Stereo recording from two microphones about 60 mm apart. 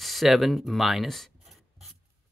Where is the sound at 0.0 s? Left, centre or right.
Centre.